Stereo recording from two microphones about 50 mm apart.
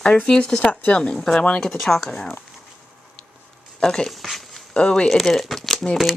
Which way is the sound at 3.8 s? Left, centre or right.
Centre.